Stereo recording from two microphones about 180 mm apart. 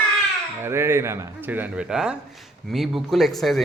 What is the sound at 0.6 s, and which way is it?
A man's voice, 15° right (ahead or behind).